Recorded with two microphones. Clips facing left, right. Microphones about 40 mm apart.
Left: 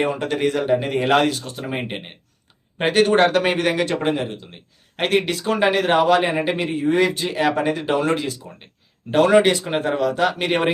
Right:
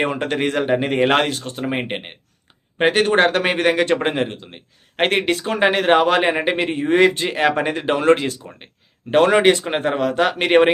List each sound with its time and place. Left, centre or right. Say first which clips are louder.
0.0 s a man's voice: even; right